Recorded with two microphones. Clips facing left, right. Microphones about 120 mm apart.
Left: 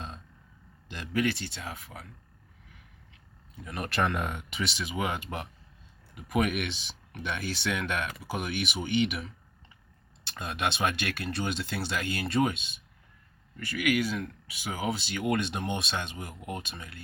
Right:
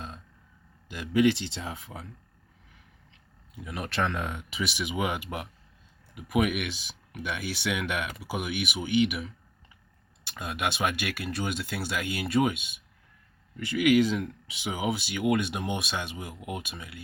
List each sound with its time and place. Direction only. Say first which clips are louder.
0.9 s speech: right 4 dB; 5° right (ahead or behind)
1.2 s speech: right 7 dB; 25° right (ahead or behind)
3.5 s speech: even; 5° right (ahead or behind)
4.7 s speech: right 3 dB; 15° right (ahead or behind)
13.6 s speech: right 6 dB; 20° right (ahead or behind)
15.0 s speech: right 3 dB; 5° right (ahead or behind)